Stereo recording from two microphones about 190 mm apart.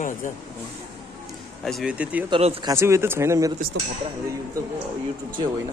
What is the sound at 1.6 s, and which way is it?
Speech, centre (ahead or behind).